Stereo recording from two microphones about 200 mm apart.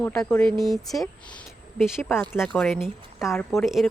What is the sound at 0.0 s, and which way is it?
Speech, 5° left (ahead or behind).